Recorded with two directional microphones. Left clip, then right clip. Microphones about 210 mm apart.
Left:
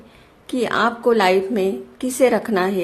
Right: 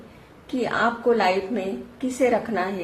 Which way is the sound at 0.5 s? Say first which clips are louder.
Left 4 dB; 55° left (ahead or behind).